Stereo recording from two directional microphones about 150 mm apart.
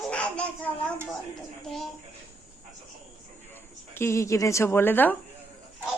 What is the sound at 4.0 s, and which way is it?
A woman's voice, 20° left (ahead or behind).